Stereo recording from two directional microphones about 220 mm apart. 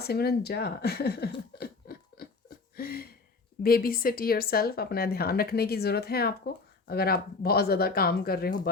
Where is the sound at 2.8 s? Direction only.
45° left (ahead or behind).